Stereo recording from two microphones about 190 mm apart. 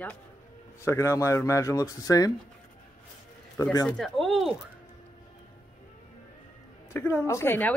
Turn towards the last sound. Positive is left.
turn(degrees=10)  # may be behind; listen again after turning